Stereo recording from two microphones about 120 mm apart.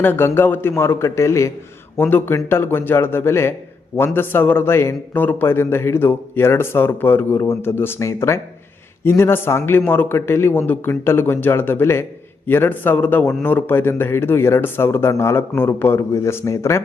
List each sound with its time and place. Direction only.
0.0 s a man's voice: 20° left (ahead or behind)